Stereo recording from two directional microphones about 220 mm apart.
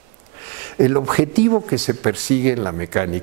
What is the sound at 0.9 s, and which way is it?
Speech, 20° right (ahead or behind).